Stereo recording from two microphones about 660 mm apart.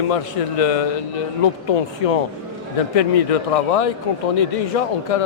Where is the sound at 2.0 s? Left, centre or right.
Left.